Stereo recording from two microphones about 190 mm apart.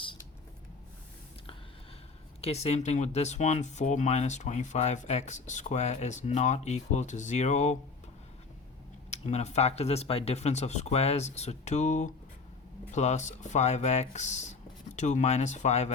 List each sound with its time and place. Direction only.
2.4 s speech: 35° left (ahead or behind)
9.0 s speech: 35° left (ahead or behind)